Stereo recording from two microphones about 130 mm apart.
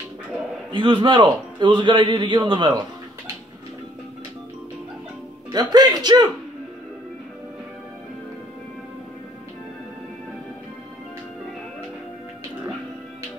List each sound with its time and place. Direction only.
0.7 s a man's voice: 40° right (ahead or behind)
5.5 s a man's voice: 30° right (ahead or behind)